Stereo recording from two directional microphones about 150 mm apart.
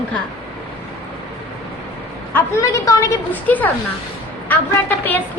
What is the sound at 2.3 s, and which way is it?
A woman's voice, 20° left (ahead or behind).